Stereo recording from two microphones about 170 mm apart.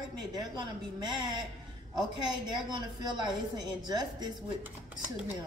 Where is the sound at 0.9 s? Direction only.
25° right (ahead or behind).